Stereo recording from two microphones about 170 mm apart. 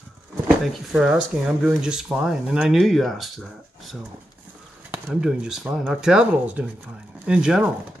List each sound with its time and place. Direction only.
0.9 s speech: 5° right (ahead or behind)
4.9 s speech: 10° right (ahead or behind)